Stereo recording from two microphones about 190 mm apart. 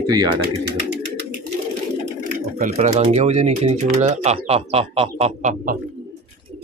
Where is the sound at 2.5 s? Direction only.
40° right (ahead or behind).